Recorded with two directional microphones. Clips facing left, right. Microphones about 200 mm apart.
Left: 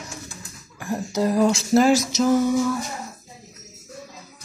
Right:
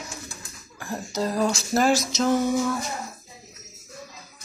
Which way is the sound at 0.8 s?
20° left (ahead or behind).